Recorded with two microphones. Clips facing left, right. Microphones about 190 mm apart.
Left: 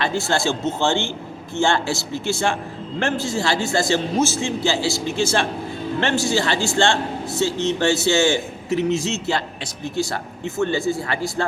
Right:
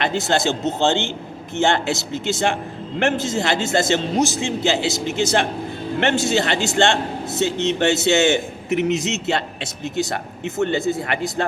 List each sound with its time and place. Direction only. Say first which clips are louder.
0.0 s a man's voice: right 1 dB; 20° right (ahead or behind)